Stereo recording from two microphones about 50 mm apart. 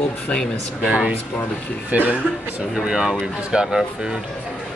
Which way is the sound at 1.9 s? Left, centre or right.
Right.